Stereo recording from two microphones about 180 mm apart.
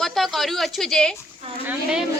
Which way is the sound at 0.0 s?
Centre (ahead or behind).